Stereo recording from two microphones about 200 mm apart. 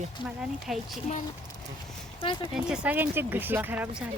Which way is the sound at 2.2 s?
25° left (ahead or behind).